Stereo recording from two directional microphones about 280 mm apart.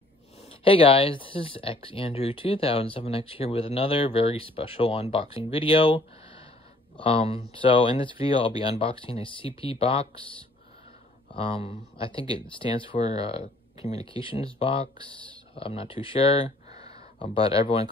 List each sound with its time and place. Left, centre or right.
0.5 s speech: centre
11.3 s speech: centre
16.7 s a sound: centre
17.2 s speech: centre